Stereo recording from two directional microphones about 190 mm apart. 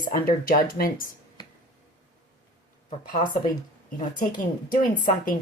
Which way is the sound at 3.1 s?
45° left (ahead or behind).